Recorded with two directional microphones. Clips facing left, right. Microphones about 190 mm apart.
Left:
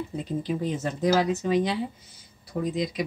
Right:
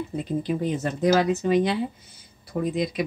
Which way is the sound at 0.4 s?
60° right (ahead or behind).